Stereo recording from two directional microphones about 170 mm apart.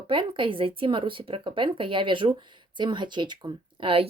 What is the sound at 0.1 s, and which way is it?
A woman's voice, 30° right (ahead or behind).